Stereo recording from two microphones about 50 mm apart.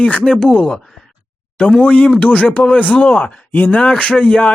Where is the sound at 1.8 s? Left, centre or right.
Left.